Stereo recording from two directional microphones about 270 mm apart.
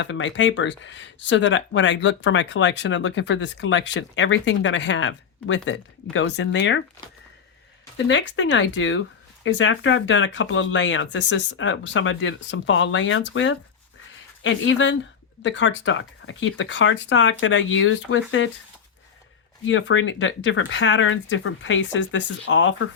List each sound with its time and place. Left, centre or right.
0.0 s speech: left
7.9 s speech: left
19.6 s speech: left